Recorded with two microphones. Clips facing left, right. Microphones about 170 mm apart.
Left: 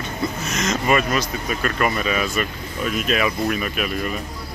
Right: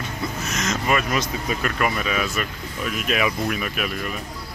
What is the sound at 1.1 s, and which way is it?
Speech, 15° right (ahead or behind).